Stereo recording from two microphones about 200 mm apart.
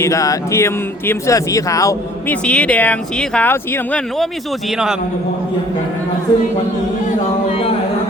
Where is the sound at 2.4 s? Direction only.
5° left (ahead or behind).